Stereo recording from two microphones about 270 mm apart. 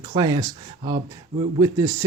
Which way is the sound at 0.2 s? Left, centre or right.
Centre.